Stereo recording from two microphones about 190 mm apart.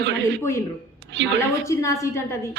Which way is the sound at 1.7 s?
15° left (ahead or behind).